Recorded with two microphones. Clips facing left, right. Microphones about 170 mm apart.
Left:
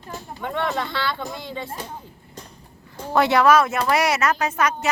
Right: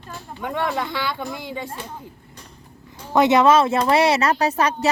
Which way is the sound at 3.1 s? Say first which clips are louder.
Right 2 dB; 20° right (ahead or behind).